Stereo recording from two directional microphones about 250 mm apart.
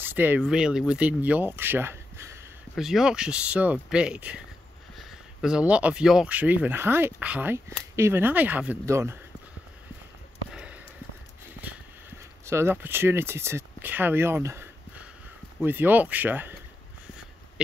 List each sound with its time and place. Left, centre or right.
0.0 s speech: centre
10.5 s sniff: centre
11.6 s a sound: centre
12.4 s speech: centre